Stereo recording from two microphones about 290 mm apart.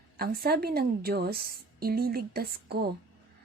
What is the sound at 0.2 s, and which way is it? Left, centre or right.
A woman's voice, right.